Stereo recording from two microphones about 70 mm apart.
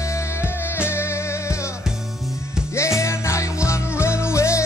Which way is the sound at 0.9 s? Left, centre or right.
Left.